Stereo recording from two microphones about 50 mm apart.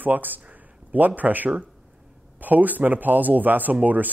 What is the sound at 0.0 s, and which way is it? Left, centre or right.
Speech, right.